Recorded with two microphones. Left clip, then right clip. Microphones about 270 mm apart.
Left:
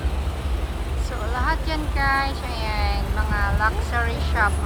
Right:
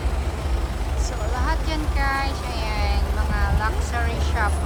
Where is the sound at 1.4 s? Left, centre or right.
Centre.